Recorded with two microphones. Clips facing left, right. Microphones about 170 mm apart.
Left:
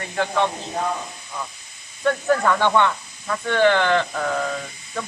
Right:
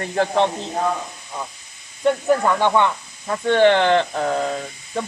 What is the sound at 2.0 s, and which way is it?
Speech, 15° right (ahead or behind).